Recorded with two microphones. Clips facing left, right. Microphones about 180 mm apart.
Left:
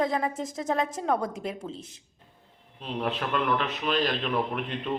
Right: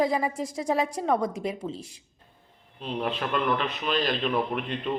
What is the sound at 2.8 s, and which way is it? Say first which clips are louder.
Speech: right 1 dB; centre (ahead or behind).